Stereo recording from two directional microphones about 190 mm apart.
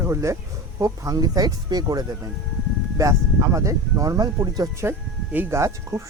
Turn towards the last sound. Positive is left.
turn(degrees=-15)  # may be behind; listen again after turning